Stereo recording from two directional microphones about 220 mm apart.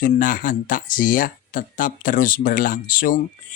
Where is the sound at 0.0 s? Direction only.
40° left (ahead or behind).